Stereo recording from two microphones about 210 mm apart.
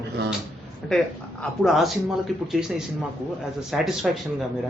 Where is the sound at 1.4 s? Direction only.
Centre (ahead or behind).